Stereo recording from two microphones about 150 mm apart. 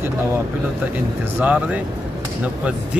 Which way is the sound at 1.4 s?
10° right (ahead or behind).